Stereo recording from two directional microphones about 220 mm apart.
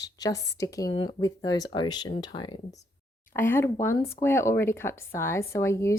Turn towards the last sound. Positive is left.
turn(degrees=10)  # may be behind; listen again after turning